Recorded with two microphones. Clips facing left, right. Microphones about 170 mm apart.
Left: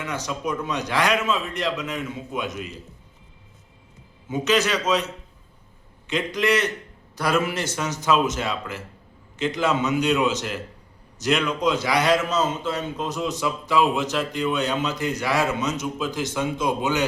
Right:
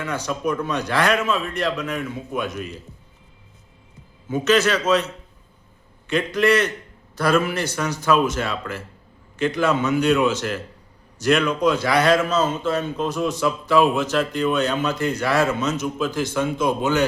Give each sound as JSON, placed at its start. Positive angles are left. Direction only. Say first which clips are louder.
{"t": 0.0, "sound": "a man's voice", "louder": "right 4 dB", "side_deg": 15}
{"t": 4.3, "sound": "a man's voice", "louder": "right 3 dB", "side_deg": 15}
{"t": 6.1, "sound": "a man's voice", "louder": "right 4 dB", "side_deg": 20}